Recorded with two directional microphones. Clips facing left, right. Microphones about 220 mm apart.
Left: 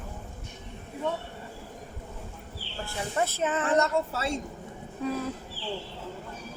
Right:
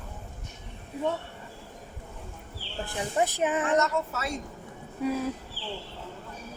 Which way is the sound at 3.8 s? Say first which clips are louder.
Left 1 dB; 30° left (ahead or behind).